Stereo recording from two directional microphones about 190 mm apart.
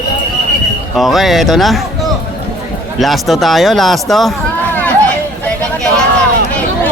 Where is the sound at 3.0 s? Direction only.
Centre (ahead or behind).